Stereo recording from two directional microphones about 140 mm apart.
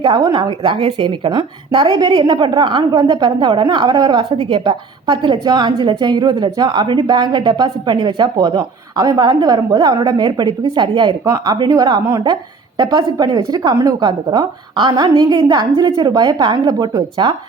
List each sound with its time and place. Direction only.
0.0 s a woman's voice: 30° right (ahead or behind)